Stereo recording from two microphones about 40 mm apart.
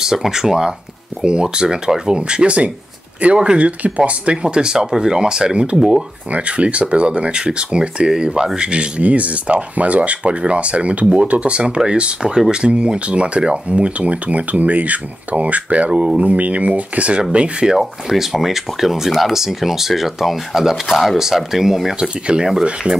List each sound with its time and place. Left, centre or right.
0.0 s speech: centre
6.3 s speech: right
17.2 s speech: right
17.7 s speech: centre